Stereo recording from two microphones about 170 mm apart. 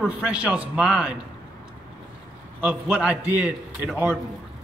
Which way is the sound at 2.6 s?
5° right (ahead or behind).